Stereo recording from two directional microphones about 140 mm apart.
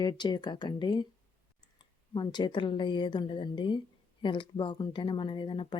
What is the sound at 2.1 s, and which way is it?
Speech, 35° left (ahead or behind).